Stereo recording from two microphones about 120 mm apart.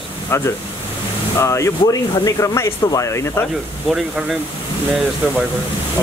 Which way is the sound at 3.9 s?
Centre (ahead or behind).